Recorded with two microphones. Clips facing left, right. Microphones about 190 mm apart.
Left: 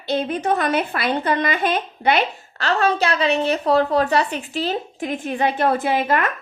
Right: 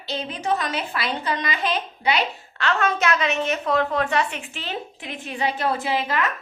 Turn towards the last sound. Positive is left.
turn(degrees=55)  # may be behind; listen again after turning